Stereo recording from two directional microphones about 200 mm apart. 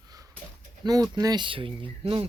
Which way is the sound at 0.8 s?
20° right (ahead or behind).